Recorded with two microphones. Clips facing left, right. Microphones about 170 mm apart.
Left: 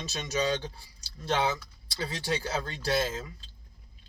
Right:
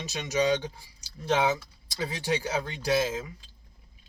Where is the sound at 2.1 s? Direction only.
15° right (ahead or behind).